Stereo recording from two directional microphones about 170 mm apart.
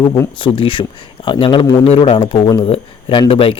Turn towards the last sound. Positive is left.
turn(degrees=30)  # may be behind; listen again after turning